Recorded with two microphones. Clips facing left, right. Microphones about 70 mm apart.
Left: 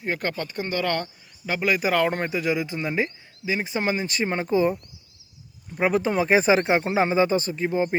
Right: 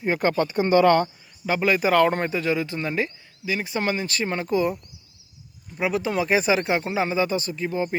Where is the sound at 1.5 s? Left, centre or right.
Centre; by 4.8 s left.